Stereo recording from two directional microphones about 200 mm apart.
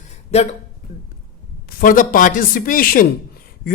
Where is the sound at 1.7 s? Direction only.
40° left (ahead or behind).